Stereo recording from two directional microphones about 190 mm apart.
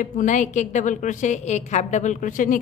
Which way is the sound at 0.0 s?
40° left (ahead or behind).